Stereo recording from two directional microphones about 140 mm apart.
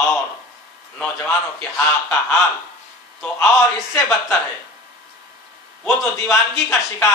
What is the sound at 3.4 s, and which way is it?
Speech, 20° left (ahead or behind).